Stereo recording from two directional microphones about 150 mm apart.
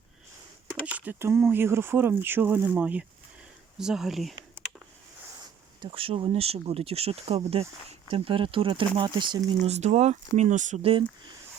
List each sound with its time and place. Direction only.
0.7 s speech: 10° right (ahead or behind)
5.8 s speech: 35° right (ahead or behind)
9.6 s speech: 50° right (ahead or behind)